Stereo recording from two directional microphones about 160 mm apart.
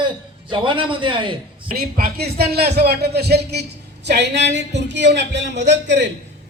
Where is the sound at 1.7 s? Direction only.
65° right (ahead or behind).